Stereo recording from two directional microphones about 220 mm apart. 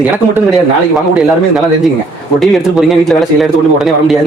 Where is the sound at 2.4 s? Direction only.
Centre (ahead or behind).